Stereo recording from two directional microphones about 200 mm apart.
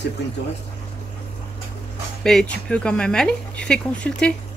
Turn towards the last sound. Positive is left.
turn(degrees=5)  # may be behind; listen again after turning